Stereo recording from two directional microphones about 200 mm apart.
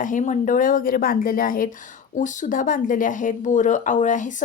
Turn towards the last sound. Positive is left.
turn(degrees=40)  # may be behind; listen again after turning